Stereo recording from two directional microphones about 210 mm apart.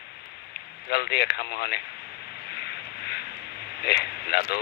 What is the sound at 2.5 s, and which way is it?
Vehicle, 50° left (ahead or behind).